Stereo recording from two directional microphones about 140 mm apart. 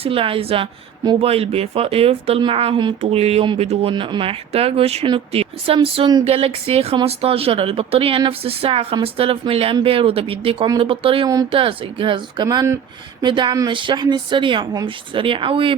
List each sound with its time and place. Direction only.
0.0 s speech: 40° right (ahead or behind); by 12.8 s 25° right (ahead or behind)
13.2 s speech: 35° right (ahead or behind)